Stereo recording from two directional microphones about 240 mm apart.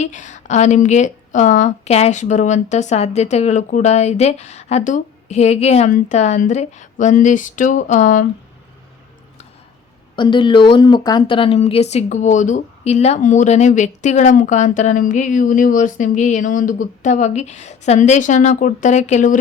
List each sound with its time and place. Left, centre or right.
0.0 s a woman's voice: left
10.2 s a woman's voice: centre